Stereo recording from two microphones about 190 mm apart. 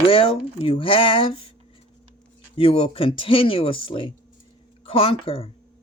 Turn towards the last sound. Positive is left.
turn(degrees=30)  # may be behind; listen again after turning